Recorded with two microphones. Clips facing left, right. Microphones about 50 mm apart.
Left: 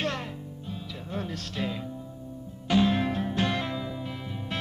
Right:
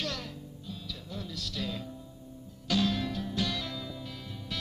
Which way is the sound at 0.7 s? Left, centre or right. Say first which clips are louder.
Left 4 dB; left.